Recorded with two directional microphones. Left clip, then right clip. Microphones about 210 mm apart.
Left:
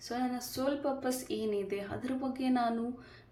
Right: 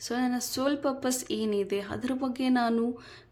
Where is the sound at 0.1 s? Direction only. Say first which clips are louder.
Right 5 dB; 40° right (ahead or behind).